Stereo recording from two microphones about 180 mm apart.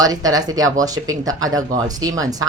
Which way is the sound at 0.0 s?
20° right (ahead or behind).